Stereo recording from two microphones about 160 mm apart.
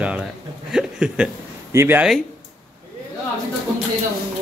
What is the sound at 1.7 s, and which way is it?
Speech, 15° right (ahead or behind).